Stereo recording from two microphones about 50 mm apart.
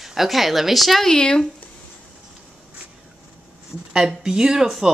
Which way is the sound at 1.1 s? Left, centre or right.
Centre.